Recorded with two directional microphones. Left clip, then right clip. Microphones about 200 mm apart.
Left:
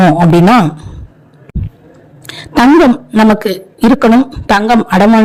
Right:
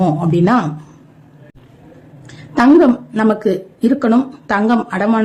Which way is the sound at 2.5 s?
40° left (ahead or behind).